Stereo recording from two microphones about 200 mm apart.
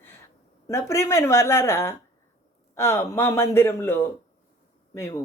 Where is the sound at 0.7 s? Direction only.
15° left (ahead or behind).